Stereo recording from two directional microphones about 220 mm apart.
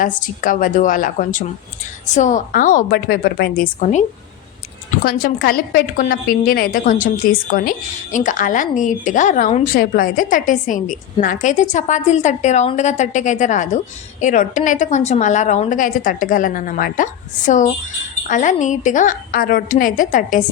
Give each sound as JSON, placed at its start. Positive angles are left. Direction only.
{"t": 0.2, "sound": "a woman's voice", "side_deg": 35}
{"t": 5.0, "sound": "a woman's voice", "side_deg": 40}